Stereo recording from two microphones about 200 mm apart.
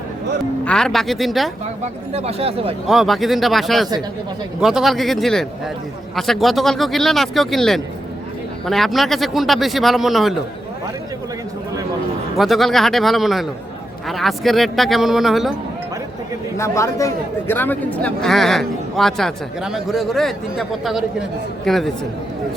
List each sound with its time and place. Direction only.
0.6 s speech: 5° left (ahead or behind)
2.1 s speech: 30° right (ahead or behind)
2.8 s speech: centre (ahead or behind)
12.4 s speech: centre (ahead or behind)
16.6 s speech: 15° left (ahead or behind)